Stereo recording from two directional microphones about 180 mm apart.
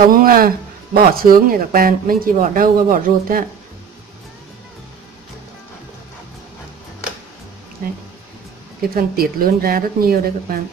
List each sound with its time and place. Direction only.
0.1 s speech: 50° right (ahead or behind)
8.9 s speech: 55° right (ahead or behind)